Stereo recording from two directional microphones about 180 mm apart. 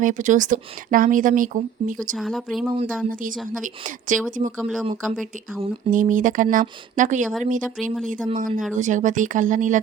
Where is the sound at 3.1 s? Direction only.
50° right (ahead or behind).